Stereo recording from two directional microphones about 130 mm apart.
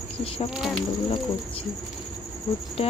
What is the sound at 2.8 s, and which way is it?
Speech, 50° left (ahead or behind).